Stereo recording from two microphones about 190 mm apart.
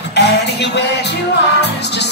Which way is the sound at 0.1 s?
60° left (ahead or behind).